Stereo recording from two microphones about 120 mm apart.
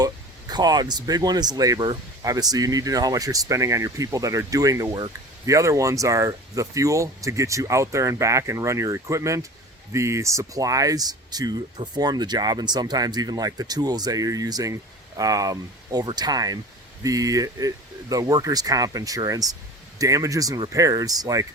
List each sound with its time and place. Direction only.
0.0 s speech: 35° right (ahead or behind)